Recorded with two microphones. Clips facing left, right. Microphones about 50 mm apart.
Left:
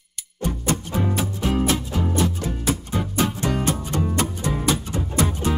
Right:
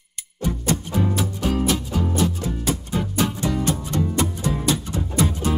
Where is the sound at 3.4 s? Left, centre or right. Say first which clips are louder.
Even; left.